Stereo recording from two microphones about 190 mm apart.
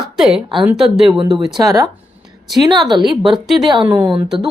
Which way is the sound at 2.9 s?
25° right (ahead or behind).